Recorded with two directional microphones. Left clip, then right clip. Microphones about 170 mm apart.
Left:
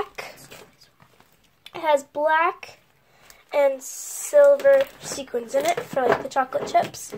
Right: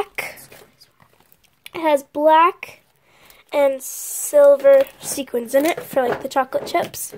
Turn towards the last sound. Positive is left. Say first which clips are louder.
# even
turn(degrees=-65)  # may be behind; listen again after turning